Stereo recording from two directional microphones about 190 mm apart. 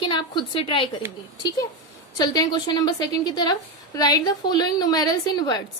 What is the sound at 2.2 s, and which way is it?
A woman's voice, 20° left (ahead or behind).